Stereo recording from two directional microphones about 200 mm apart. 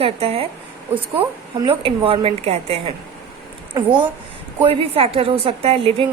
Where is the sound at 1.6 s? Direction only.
25° right (ahead or behind).